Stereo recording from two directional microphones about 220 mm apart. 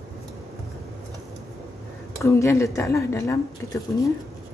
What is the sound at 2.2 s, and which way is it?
A woman's voice, 15° left (ahead or behind).